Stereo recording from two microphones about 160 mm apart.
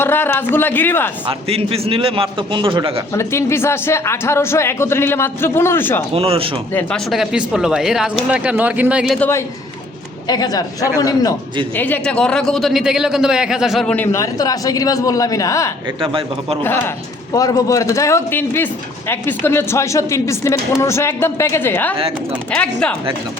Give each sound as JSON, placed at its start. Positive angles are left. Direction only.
{"t": 0.0, "sound": "a man's voice", "side_deg": 15}
{"t": 1.3, "sound": "a man's voice", "side_deg": -35}
{"t": 3.2, "sound": "a man's voice", "side_deg": 15}
{"t": 6.1, "sound": "a man's voice", "side_deg": -35}
{"t": 6.7, "sound": "speech", "side_deg": 0}
{"t": 9.1, "sound": "a man's voice", "side_deg": 10}
{"t": 10.2, "sound": "a man's voice", "side_deg": 25}
{"t": 11.8, "sound": "speech", "side_deg": 10}
{"t": 13.9, "sound": "a man's voice", "side_deg": 15}
{"t": 16.0, "sound": "a man's voice", "side_deg": -35}
{"t": 16.6, "sound": "a man's voice", "side_deg": 15}